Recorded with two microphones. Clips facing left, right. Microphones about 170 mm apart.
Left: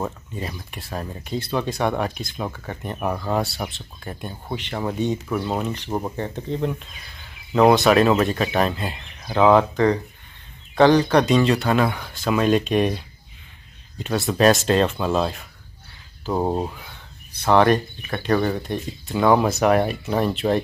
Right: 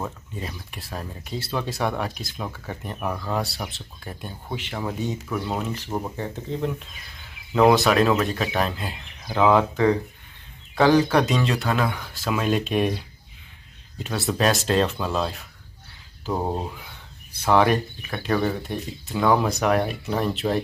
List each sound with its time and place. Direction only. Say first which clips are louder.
0.4 s speech: left 3 dB; centre (ahead or behind)
3.0 s speech: left 4 dB; 20° left (ahead or behind)
3.3 s speech: left 4 dB; centre (ahead or behind)
5.9 s speech: left 3 dB; 20° left (ahead or behind)
6.1 s speech: left 3 dB; centre (ahead or behind)
16.3 s speech: left 4 dB; 15° left (ahead or behind)
17.3 s speech: left 3 dB; 10° right (ahead or behind)